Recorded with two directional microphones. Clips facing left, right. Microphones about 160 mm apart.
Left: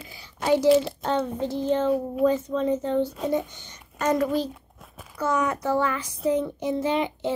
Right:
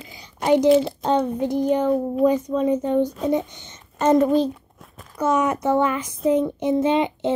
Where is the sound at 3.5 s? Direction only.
20° right (ahead or behind).